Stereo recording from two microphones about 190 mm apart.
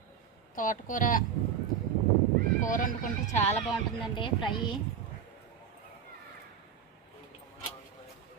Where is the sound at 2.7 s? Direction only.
45° left (ahead or behind).